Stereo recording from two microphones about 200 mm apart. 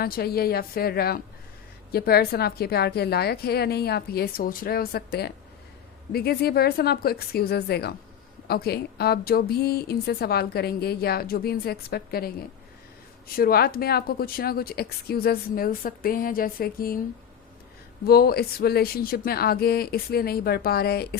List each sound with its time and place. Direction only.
0.0 s a woman's voice: 50° left (ahead or behind)
18.0 s a woman's voice: 50° left (ahead or behind)